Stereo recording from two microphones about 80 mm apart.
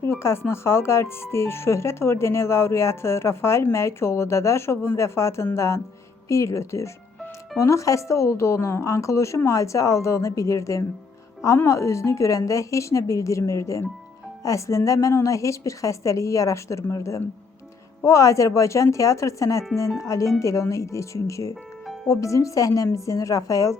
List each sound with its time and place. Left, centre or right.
0.0 s speech: left
21.5 s music: centre
22.1 s speech: left